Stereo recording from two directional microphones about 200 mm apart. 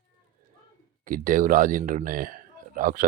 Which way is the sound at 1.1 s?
40° right (ahead or behind).